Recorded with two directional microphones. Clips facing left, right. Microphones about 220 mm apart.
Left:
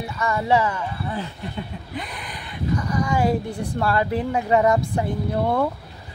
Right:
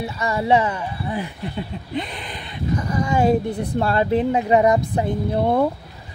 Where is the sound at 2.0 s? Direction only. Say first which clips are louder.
Right 6 dB; 25° right (ahead or behind).